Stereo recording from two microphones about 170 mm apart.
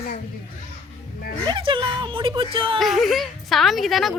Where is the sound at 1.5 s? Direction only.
30° right (ahead or behind).